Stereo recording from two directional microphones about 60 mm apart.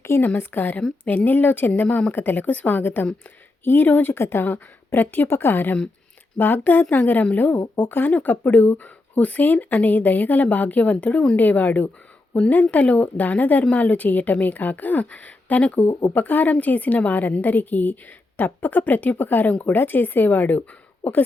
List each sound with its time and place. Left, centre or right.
0.3 s speech: left